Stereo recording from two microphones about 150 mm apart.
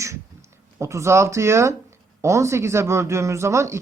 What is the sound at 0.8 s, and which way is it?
Speech, 20° right (ahead or behind).